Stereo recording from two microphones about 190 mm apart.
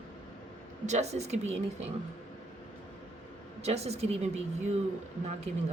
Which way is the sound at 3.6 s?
35° right (ahead or behind).